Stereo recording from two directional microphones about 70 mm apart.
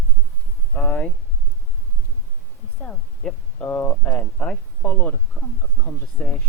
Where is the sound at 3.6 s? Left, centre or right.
Left.